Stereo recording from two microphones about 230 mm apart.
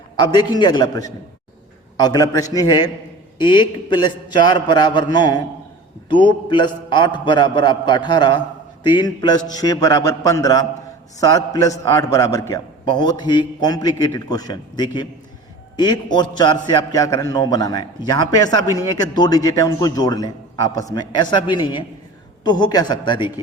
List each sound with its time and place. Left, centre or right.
0.2 s a man's voice: centre